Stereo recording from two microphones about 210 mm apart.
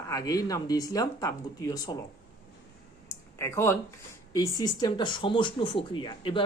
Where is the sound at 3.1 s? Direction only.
15° left (ahead or behind).